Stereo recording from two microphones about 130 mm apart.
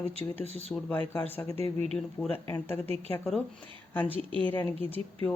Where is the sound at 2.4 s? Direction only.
20° left (ahead or behind).